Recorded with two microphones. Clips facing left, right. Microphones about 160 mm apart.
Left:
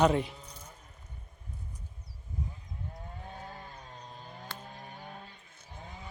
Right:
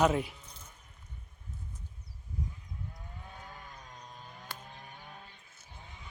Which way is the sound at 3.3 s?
35° left (ahead or behind).